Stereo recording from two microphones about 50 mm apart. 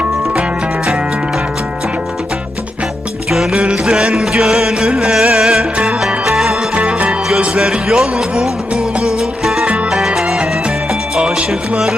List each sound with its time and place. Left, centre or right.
3.2 s music: centre
3.5 s music: right
3.8 s music: centre
5.7 s music: right
6.1 s music: centre
6.7 s music: right
7.6 s music: centre